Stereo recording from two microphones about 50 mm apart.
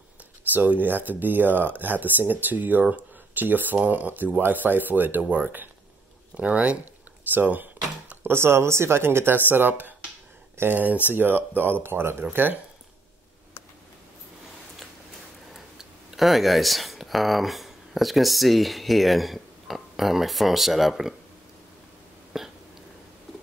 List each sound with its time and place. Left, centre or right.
0.5 s speech: right
6.3 s speech: right
7.2 s cash register: right
8.2 s speech: right
9.5 s speech: right
15.5 s speech: centre
22.3 s hiccup: centre